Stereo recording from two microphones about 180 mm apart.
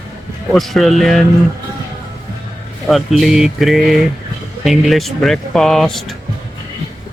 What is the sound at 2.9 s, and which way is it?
Music, centre (ahead or behind).